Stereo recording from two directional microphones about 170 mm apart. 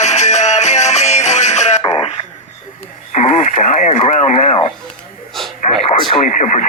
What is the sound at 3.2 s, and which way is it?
Speech, 45° left (ahead or behind).